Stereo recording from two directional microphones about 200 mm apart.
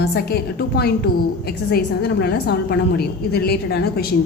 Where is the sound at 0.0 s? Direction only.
55° left (ahead or behind).